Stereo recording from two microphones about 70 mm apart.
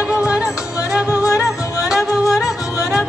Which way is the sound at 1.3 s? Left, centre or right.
Left.